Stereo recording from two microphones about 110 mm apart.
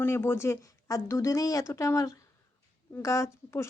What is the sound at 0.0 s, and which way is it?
A woman's voice, 20° left (ahead or behind).